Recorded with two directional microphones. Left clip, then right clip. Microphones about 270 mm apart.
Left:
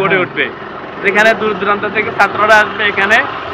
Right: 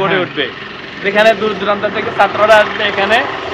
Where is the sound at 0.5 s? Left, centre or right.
Centre.